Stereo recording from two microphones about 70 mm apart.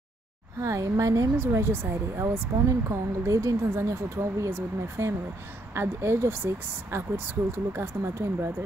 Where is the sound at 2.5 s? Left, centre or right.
Right.